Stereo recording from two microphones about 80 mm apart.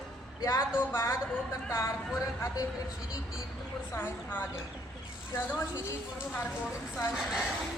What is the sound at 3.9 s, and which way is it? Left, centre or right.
Speech, left.